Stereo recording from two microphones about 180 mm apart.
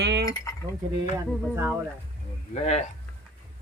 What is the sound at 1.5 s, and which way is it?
Speech, 10° right (ahead or behind).